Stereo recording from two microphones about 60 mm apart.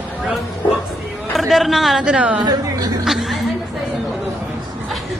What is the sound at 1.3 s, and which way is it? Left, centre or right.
Speech, centre.